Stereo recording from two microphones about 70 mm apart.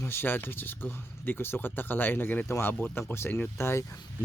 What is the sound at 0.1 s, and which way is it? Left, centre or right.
Speech, left.